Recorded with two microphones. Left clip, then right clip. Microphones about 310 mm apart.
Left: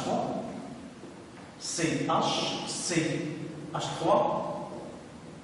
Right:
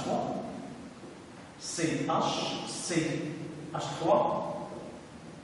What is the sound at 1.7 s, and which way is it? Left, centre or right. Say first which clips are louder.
Speech: left 2 dB; centre.